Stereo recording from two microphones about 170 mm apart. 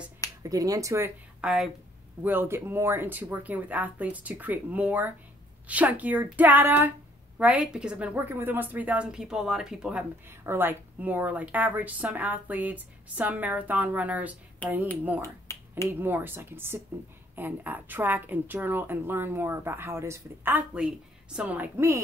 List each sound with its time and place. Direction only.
0.4 s speech: 20° right (ahead or behind)
1.4 s a woman's voice: 5° right (ahead or behind)
15.9 s a woman's voice: 10° right (ahead or behind)